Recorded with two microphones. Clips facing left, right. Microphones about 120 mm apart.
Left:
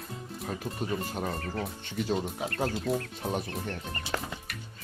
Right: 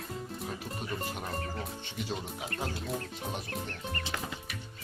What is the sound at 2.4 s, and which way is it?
Speech, 50° left (ahead or behind).